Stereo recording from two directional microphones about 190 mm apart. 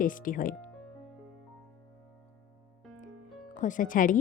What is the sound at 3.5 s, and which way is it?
Speech, 40° left (ahead or behind).